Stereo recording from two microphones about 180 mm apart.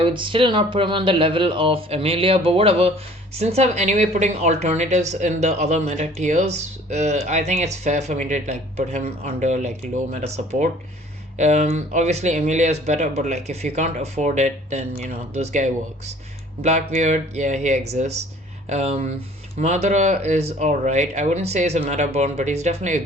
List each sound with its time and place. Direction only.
0.0 s a woman's voice: 30° right (ahead or behind)